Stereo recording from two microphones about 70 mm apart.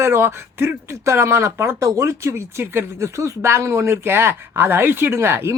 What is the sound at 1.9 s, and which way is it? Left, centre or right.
Speech, right.